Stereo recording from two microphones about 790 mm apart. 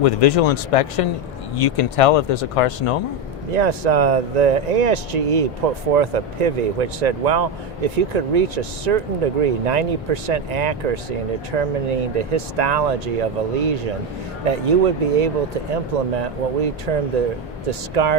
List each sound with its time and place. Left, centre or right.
0.0 s speech: left
3.5 s speech: right